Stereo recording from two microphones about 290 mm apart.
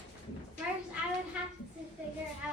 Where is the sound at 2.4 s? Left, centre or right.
Centre.